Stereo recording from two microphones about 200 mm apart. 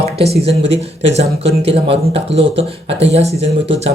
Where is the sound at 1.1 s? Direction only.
30° right (ahead or behind).